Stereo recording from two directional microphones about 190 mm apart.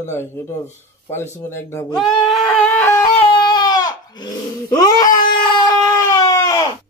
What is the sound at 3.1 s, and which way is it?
Baby cry, 20° left (ahead or behind).